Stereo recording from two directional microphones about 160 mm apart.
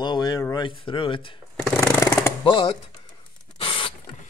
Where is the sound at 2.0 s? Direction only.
20° left (ahead or behind).